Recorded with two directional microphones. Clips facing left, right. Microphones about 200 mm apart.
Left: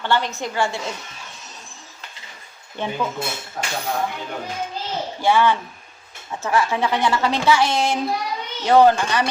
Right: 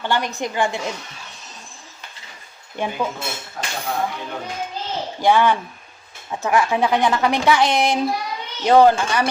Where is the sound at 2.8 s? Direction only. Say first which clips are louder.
Right 2 dB; 10° right (ahead or behind).